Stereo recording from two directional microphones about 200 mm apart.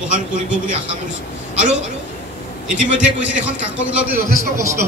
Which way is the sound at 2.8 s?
5° right (ahead or behind).